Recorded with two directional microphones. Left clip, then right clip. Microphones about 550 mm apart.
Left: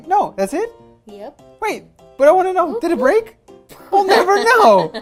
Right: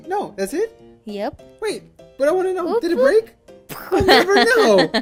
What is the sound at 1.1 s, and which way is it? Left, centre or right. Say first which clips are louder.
Speech: right 8 dB; right.